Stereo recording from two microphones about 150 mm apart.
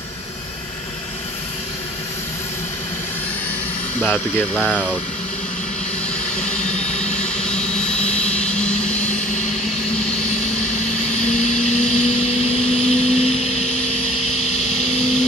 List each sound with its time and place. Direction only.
4.0 s speech: 10° left (ahead or behind)
6.6 s vehicle: 50° left (ahead or behind)
7.4 s vehicle: 5° left (ahead or behind)
11.1 s vehicle: 50° left (ahead or behind)